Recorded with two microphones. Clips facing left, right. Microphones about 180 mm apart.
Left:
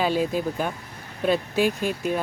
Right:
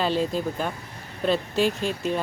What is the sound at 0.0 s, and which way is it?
Speech, 10° left (ahead or behind).